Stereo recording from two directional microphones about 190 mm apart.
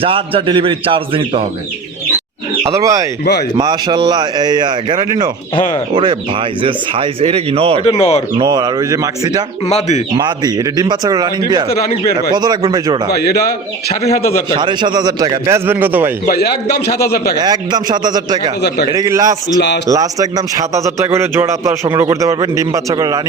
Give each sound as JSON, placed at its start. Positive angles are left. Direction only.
{"t": 0.0, "sound": "speech", "side_deg": -30}
{"t": 2.7, "sound": "a man's voice", "side_deg": -15}
{"t": 6.6, "sound": "speech", "side_deg": -25}
{"t": 7.9, "sound": "speech", "side_deg": 30}
{"t": 8.4, "sound": "speech", "side_deg": -20}
{"t": 9.6, "sound": "speech", "side_deg": 35}
{"t": 10.2, "sound": "speech", "side_deg": -20}
{"t": 13.1, "sound": "a man's voice", "side_deg": 55}
{"t": 13.8, "sound": "speech", "side_deg": 35}
{"t": 14.5, "sound": "speech", "side_deg": -25}
{"t": 16.2, "sound": "a man's voice", "side_deg": 55}
{"t": 17.3, "sound": "a man's voice", "side_deg": -20}